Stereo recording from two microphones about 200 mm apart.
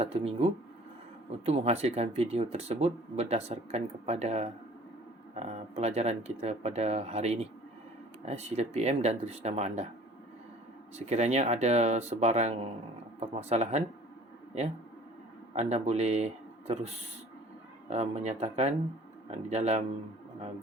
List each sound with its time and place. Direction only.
0.0 s speech: 30° right (ahead or behind)
10.9 s speech: 35° right (ahead or behind)